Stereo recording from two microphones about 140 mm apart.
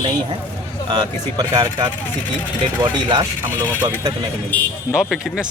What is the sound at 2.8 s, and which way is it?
Speech, 35° right (ahead or behind).